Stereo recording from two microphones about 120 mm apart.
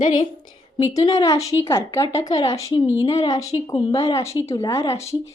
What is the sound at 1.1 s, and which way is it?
A woman's voice, 30° left (ahead or behind).